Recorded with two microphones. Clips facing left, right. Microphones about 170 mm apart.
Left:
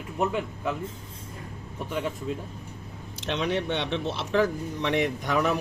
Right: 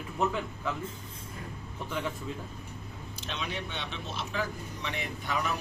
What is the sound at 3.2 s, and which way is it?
Speech, 70° left (ahead or behind).